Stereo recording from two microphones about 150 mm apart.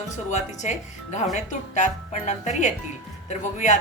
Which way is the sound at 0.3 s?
50° left (ahead or behind).